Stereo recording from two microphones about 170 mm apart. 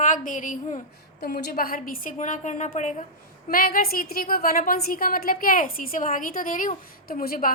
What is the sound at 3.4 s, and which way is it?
A woman's voice, 55° left (ahead or behind).